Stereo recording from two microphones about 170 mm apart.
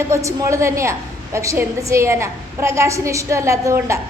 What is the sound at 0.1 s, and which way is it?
A woman's voice, 15° right (ahead or behind).